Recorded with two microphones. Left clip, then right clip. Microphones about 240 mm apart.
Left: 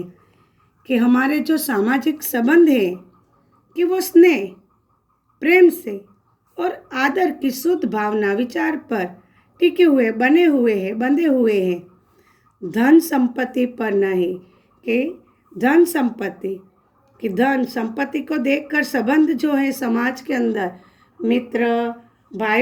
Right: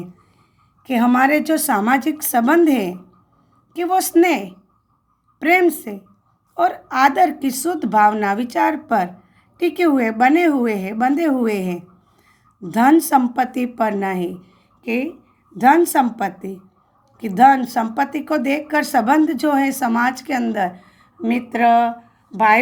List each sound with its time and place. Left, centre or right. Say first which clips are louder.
0.9 s speech: right 3 dB; right
15.5 s a woman's voice: right 3 dB; right